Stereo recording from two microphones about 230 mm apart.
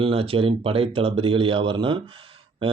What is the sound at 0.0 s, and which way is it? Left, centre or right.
Speech, right.